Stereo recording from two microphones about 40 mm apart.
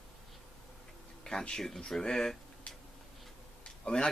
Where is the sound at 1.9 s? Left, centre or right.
Centre.